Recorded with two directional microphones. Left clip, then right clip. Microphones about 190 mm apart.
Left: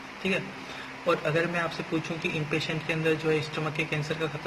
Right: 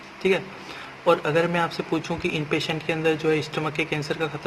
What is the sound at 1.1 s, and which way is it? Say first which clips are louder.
Speech: right 6 dB; 60° right (ahead or behind).